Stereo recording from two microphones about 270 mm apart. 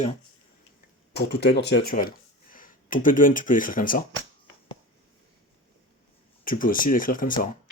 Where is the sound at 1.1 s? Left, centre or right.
Left.